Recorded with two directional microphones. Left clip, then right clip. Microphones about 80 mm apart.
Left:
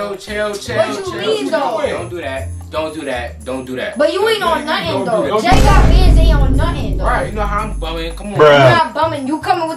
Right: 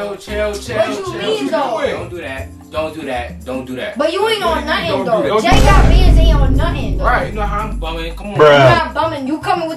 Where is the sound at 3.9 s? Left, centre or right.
Centre.